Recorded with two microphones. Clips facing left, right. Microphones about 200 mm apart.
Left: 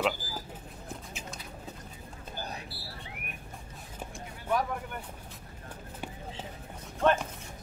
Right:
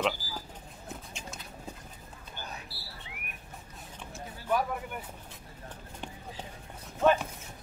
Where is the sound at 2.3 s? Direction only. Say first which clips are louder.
Left 4 dB; 35° left (ahead or behind).